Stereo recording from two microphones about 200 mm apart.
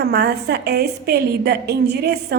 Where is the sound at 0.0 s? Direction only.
50° right (ahead or behind).